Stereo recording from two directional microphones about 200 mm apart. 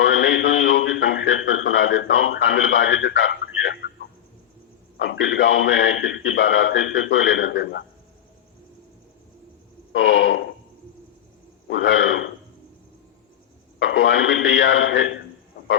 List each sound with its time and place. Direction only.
0.0 s a sound: 70° left (ahead or behind)
4.9 s a man's voice: 70° left (ahead or behind)
9.9 s a man's voice: 70° left (ahead or behind)
11.7 s a man's voice: 75° left (ahead or behind)
13.7 s a man's voice: 65° left (ahead or behind)